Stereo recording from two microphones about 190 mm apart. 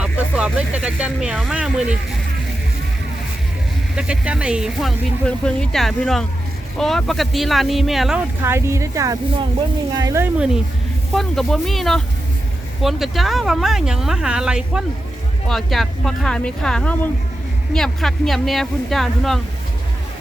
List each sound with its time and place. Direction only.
0.0 s speech: 5° right (ahead or behind)
3.9 s speech: 5° right (ahead or behind)
8.4 s speech: 15° right (ahead or behind)
11.1 s speech: centre (ahead or behind)